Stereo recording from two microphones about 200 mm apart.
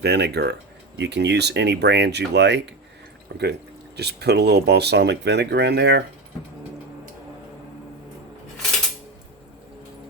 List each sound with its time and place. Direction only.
0.0 s speech: 55° right (ahead or behind)
3.9 s speech: 55° right (ahead or behind)